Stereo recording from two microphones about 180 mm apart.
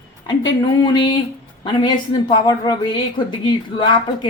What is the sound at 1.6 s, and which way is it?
A woman's voice, 25° left (ahead or behind).